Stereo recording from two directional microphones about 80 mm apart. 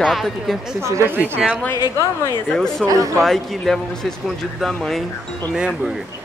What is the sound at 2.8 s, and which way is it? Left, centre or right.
Speech, right.